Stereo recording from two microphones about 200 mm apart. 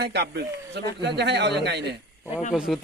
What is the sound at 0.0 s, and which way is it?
A man's voice, 55° right (ahead or behind).